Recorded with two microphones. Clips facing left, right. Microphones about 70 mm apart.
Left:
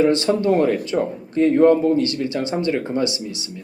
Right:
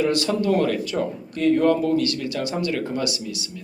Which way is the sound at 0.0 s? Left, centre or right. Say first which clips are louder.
Left 4 dB; left.